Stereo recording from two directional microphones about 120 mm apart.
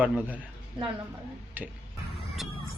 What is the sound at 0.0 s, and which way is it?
Speech, 10° right (ahead or behind).